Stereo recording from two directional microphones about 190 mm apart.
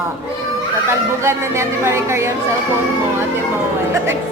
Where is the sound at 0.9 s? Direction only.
15° right (ahead or behind).